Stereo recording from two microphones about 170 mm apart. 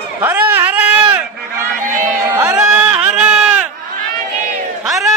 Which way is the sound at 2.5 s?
5° right (ahead or behind).